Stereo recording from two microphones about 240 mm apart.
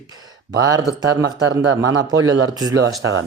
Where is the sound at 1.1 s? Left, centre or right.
Right.